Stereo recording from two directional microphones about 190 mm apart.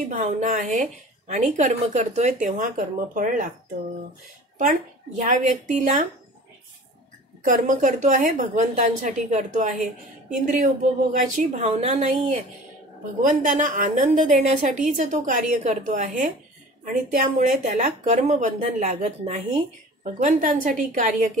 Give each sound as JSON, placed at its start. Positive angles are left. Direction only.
{"t": 0.1, "sound": "a woman's voice", "side_deg": -40}
{"t": 4.6, "sound": "a woman's voice", "side_deg": -40}
{"t": 7.4, "sound": "a woman's voice", "side_deg": -45}